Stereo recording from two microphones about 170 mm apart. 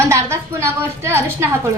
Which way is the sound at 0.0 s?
15° right (ahead or behind).